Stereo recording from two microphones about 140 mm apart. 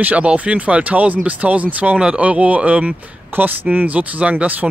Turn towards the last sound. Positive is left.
turn(degrees=-10)  # may be behind; listen again after turning